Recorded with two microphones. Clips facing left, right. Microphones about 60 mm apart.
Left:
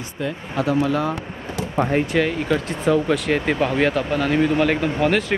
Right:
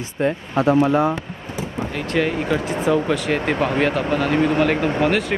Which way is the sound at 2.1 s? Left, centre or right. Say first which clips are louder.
Even; centre.